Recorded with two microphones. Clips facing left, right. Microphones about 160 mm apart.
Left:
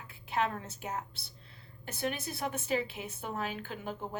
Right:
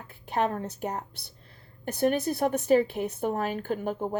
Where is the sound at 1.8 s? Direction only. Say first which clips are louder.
Right 11 dB; 50° right (ahead or behind).